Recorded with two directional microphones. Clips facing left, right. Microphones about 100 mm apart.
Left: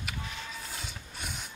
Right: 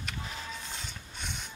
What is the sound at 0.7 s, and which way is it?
Rub, 5° left (ahead or behind).